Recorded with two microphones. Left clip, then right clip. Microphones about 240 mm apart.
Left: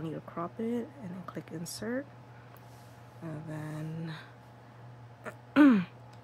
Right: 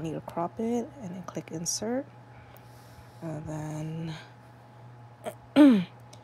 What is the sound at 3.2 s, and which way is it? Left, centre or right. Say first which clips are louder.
Speech: right 5 dB; centre.